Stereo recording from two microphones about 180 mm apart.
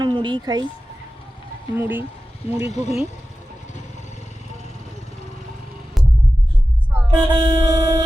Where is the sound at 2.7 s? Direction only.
40° left (ahead or behind).